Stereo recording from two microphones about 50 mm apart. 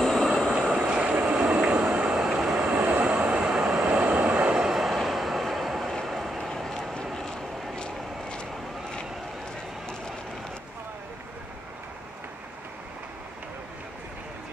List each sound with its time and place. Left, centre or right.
0.0 s train: centre
0.5 s vehicle: centre
1.0 s vehicle: right
2.1 s vehicle: centre
2.6 s vehicle: right; by 3.9 s centre
3.9 s vehicle: right
4.6 s vehicle: centre
6.5 s vehicle: centre